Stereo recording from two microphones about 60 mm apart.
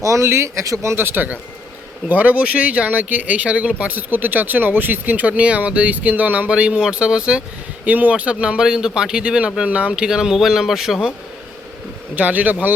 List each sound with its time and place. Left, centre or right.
0.0 s speech: right
0.9 s a man's voice: right; by 7.4 s centre
7.9 s speech: right; by 11.1 s centre
12.1 s speech: right